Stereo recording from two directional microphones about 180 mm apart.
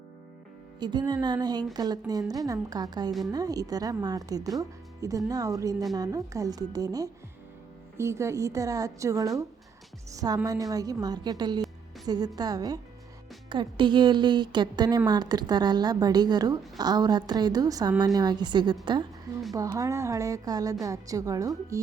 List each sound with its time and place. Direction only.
0.8 s a woman's voice: 25° right (ahead or behind)